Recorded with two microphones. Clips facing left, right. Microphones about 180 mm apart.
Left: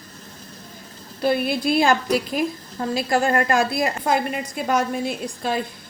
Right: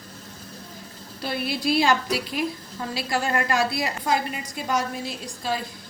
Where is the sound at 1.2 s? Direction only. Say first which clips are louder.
Left 6 dB; 55° left (ahead or behind).